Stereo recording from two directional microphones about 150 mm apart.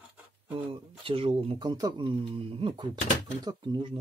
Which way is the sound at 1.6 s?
25° right (ahead or behind).